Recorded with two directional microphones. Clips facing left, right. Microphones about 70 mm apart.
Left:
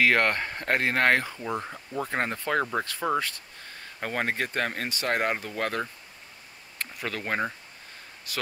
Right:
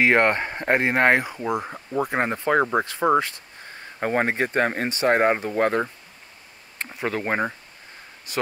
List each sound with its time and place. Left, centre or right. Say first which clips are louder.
0.0 s speech: right 4 dB; right